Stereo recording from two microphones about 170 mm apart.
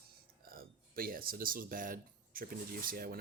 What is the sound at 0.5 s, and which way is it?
Speech, 60° right (ahead or behind).